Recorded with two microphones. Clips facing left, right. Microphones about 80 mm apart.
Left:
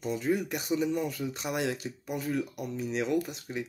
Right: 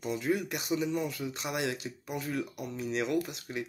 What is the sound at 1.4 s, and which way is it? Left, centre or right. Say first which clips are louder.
Speech: left 2 dB; left.